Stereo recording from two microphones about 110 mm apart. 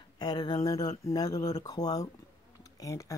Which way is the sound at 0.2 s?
40° left (ahead or behind).